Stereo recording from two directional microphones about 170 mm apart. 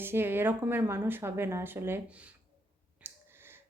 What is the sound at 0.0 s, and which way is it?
A woman's voice, 15° right (ahead or behind).